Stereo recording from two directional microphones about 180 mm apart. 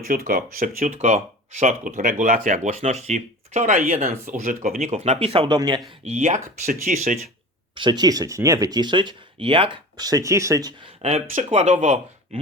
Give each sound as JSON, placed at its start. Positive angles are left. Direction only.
{"t": 0.1, "sound": "speech", "side_deg": -50}
{"t": 0.9, "sound": "speech", "side_deg": -40}
{"t": 4.9, "sound": "speech", "side_deg": -35}
{"t": 5.5, "sound": "speech", "side_deg": -20}
{"t": 6.1, "sound": "speech", "side_deg": -40}
{"t": 7.8, "sound": "speech", "side_deg": -25}